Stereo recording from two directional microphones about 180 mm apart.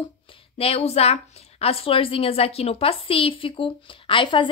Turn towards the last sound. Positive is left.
turn(degrees=25)  # may be behind; listen again after turning